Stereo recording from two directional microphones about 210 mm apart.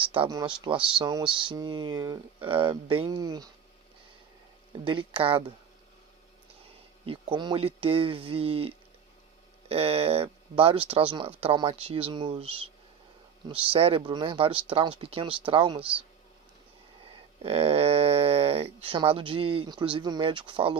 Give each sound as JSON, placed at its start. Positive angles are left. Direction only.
{"t": 0.0, "sound": "speech", "side_deg": -25}
{"t": 4.9, "sound": "speech", "side_deg": -25}
{"t": 7.0, "sound": "speech", "side_deg": -25}
{"t": 17.4, "sound": "speech", "side_deg": -30}